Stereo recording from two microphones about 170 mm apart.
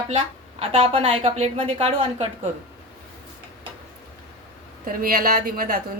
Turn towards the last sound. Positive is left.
turn(degrees=-60)  # may be behind; listen again after turning